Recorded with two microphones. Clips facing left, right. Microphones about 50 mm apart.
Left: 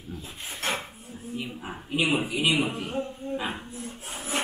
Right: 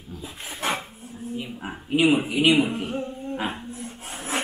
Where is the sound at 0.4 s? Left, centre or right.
Right.